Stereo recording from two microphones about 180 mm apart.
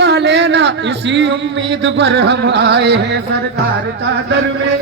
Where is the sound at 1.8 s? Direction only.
70° right (ahead or behind).